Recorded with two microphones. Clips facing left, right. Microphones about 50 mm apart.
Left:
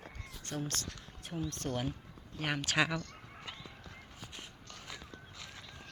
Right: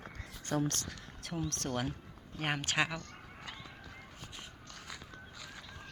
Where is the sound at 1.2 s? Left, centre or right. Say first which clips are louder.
Even; right.